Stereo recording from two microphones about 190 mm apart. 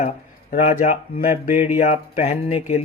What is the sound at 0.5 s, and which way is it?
Speech, 40° left (ahead or behind).